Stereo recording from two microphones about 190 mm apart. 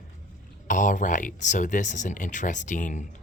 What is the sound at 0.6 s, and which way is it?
Speech, 40° left (ahead or behind).